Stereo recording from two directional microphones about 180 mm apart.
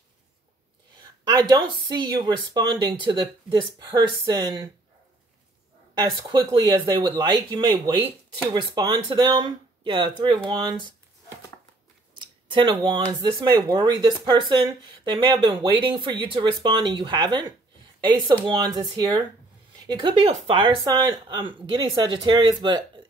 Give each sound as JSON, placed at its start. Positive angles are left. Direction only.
{"t": 1.3, "sound": "speech", "side_deg": -20}
{"t": 5.9, "sound": "speech", "side_deg": -25}
{"t": 12.1, "sound": "speech", "side_deg": -25}